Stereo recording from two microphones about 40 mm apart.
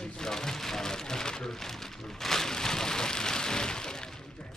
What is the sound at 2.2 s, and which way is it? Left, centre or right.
Rain, centre.